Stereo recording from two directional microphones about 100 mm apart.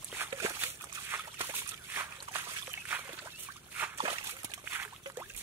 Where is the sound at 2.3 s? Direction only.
20° right (ahead or behind).